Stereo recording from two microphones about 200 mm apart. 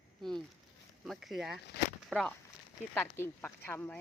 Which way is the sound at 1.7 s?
55° left (ahead or behind).